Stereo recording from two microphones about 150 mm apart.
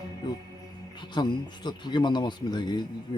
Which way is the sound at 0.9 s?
30° left (ahead or behind).